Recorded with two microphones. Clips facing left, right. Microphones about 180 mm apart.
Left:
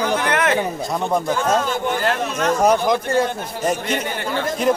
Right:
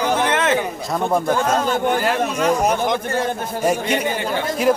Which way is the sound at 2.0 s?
10° right (ahead or behind).